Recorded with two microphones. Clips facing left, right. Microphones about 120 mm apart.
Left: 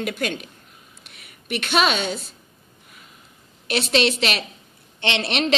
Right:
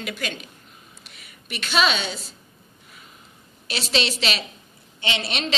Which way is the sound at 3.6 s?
55° left (ahead or behind).